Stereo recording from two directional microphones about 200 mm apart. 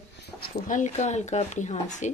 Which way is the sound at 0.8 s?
35° left (ahead or behind).